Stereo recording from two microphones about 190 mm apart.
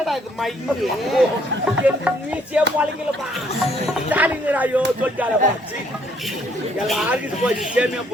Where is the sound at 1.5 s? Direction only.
70° right (ahead or behind).